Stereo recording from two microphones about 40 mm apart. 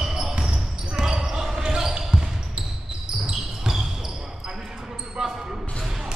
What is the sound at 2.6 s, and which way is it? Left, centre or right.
Basketball bounce, centre.